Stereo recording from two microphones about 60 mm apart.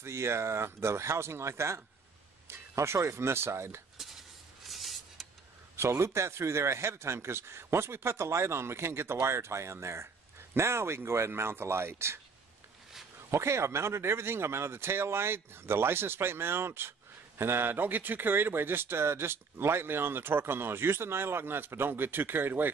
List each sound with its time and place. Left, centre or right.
0.0 s speech: right
4.6 s rub: centre
5.8 s speech: right
13.3 s speech: right